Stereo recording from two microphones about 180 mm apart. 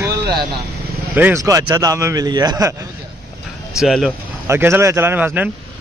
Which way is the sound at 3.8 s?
Centre (ahead or behind).